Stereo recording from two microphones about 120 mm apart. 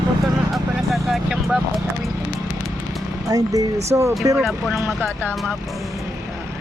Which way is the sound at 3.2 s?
30° right (ahead or behind).